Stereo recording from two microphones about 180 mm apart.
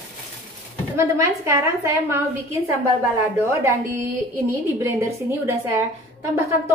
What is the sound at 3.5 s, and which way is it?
A woman's voice, 15° right (ahead or behind).